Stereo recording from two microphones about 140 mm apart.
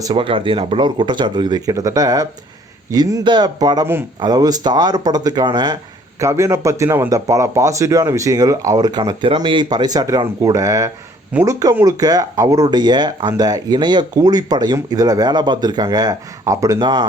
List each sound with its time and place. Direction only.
0.0 s speech: 35° right (ahead or behind)
6.1 s speech: 20° right (ahead or behind)